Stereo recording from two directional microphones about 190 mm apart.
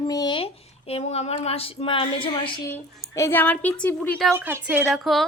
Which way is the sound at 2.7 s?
15° left (ahead or behind).